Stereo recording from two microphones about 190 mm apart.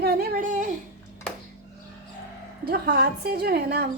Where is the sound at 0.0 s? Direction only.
55° right (ahead or behind).